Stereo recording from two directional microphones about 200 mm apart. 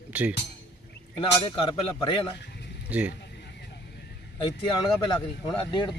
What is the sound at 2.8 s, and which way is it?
Speech, 5° right (ahead or behind).